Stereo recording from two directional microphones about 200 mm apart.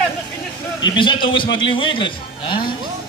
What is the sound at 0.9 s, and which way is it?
Speech, 25° left (ahead or behind).